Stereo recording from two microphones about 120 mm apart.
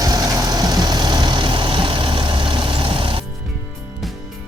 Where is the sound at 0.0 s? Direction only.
30° right (ahead or behind).